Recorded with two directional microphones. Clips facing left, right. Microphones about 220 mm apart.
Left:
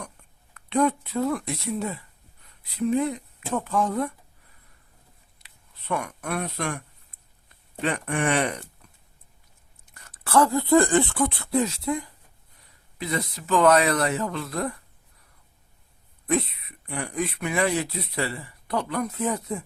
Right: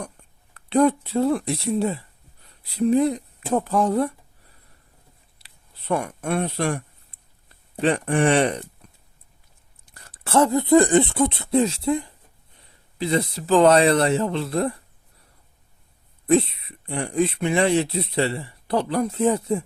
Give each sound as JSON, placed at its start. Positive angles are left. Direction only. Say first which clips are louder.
{"t": 0.5, "sound": "speech", "louder": "right 5 dB", "side_deg": -35}
{"t": 5.9, "sound": "speech", "louder": "right 5 dB", "side_deg": -30}
{"t": 9.9, "sound": "speech", "louder": "right 1 dB", "side_deg": -30}
{"t": 16.2, "sound": "speech", "louder": "right 6 dB", "side_deg": -30}